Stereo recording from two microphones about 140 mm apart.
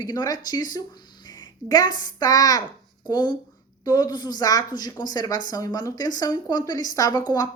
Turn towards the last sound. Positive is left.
turn(degrees=25)  # may be behind; listen again after turning